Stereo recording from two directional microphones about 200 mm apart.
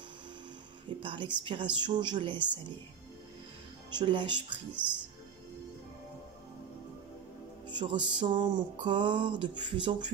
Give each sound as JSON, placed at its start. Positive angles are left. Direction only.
{"t": 1.0, "sound": "music", "side_deg": -25}
{"t": 3.9, "sound": "music", "side_deg": -25}
{"t": 4.8, "sound": "speech", "side_deg": -5}
{"t": 7.7, "sound": "music", "side_deg": -25}